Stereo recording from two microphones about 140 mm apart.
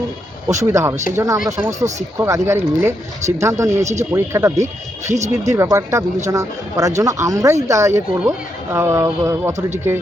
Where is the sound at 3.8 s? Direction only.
55° right (ahead or behind).